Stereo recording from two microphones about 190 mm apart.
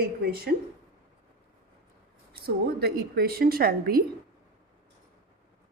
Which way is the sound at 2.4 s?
55° right (ahead or behind).